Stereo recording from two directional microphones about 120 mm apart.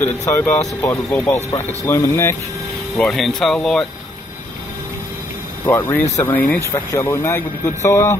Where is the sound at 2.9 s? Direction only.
5° left (ahead or behind).